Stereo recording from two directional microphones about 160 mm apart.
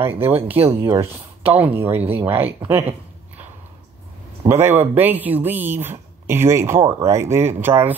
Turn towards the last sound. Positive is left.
turn(degrees=-15)  # may be behind; listen again after turning